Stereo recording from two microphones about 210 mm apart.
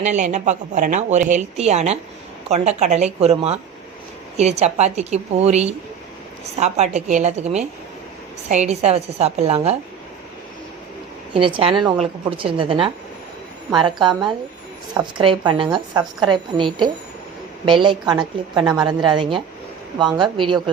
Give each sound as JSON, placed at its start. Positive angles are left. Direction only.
{"t": 0.0, "sound": "a woman's voice", "side_deg": -35}
{"t": 11.3, "sound": "a woman's voice", "side_deg": -25}
{"t": 15.2, "sound": "a woman's voice", "side_deg": -25}